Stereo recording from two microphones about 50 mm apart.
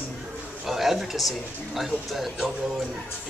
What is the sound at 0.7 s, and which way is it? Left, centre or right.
Speech, centre.